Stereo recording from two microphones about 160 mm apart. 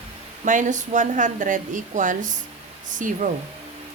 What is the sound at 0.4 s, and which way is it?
Speech, 50° right (ahead or behind).